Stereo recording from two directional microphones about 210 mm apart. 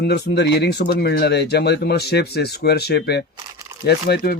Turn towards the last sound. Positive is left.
turn(degrees=45)  # may be behind; listen again after turning